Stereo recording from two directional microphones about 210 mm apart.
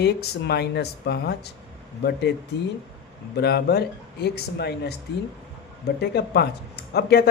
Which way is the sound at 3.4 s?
50° left (ahead or behind).